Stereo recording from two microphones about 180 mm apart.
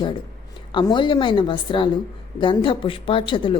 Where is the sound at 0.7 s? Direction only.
25° left (ahead or behind).